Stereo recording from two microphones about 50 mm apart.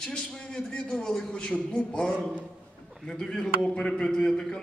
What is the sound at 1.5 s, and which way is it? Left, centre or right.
A woman's voice, left.